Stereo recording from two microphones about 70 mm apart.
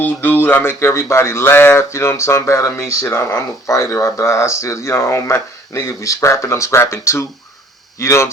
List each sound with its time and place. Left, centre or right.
0.0 s speech: left